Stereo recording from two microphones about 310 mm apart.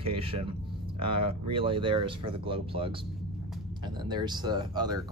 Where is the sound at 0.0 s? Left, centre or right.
Centre.